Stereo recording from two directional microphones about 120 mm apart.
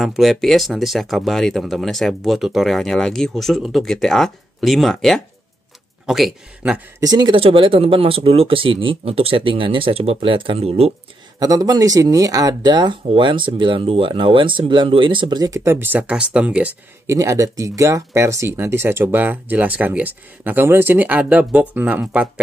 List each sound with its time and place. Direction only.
0.0 s speech: centre (ahead or behind)
7.0 s speech: 35° right (ahead or behind)
7.3 s speech: 50° right (ahead or behind)
11.3 s speech: 30° right (ahead or behind); by 16.7 s 10° right (ahead or behind)
17.0 s speech: 25° right (ahead or behind)